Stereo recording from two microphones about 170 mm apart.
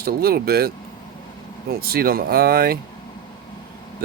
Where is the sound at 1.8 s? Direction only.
65° right (ahead or behind).